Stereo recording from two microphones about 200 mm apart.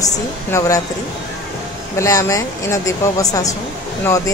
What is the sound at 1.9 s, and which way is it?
A woman's voice, 15° left (ahead or behind).